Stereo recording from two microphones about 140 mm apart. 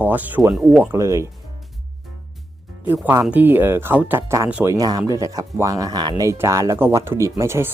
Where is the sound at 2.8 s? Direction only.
15° right (ahead or behind).